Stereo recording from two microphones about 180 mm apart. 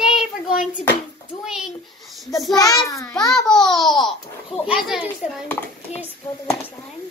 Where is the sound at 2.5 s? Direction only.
20° left (ahead or behind).